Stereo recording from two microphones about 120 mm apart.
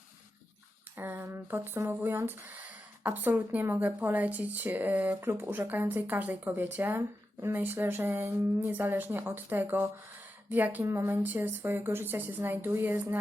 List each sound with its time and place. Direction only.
0.9 s speech: 20° right (ahead or behind)